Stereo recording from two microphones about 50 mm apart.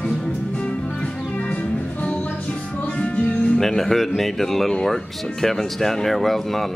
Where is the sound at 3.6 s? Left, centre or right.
Centre.